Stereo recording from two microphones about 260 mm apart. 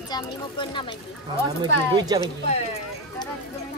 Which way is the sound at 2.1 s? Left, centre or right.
Centre.